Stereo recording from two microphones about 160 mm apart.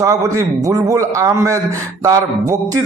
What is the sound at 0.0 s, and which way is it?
A man's voice, 20° right (ahead or behind).